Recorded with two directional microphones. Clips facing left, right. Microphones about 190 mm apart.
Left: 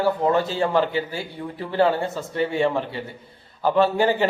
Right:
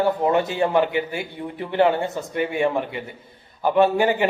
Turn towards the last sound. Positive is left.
turn(degrees=-15)  # may be behind; listen again after turning